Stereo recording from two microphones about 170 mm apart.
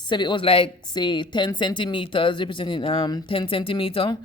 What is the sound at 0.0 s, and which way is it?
Speech, 25° left (ahead or behind).